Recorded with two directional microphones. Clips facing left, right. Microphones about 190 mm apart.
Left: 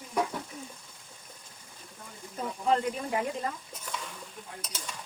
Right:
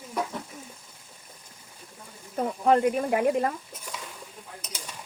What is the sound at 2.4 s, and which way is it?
Speech, 60° right (ahead or behind).